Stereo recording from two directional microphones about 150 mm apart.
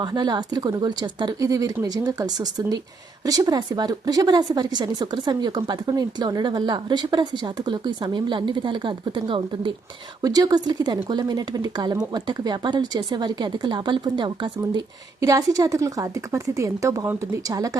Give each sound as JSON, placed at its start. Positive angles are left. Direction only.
{"t": 0.0, "sound": "a woman's voice", "side_deg": -30}